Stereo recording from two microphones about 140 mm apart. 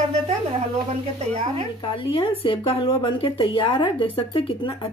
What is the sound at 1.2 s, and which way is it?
Speech, 50° right (ahead or behind).